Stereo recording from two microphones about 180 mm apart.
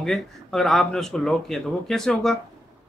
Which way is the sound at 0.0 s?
Centre (ahead or behind).